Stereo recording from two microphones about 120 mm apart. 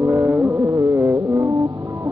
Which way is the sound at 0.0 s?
20° right (ahead or behind).